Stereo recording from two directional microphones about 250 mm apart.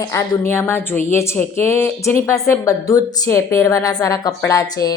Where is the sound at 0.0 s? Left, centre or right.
Centre.